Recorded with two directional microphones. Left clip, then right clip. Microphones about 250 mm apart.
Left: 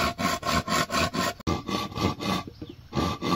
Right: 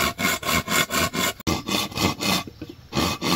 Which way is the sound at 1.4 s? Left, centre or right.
Right.